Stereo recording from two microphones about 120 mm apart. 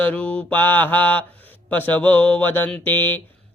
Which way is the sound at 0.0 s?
10° left (ahead or behind).